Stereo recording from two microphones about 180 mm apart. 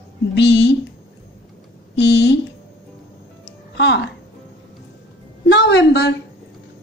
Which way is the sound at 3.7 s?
75° left (ahead or behind).